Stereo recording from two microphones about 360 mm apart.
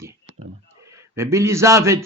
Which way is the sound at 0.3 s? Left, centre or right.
Right.